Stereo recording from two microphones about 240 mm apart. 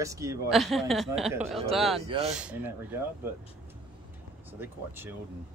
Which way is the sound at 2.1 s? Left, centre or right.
Right.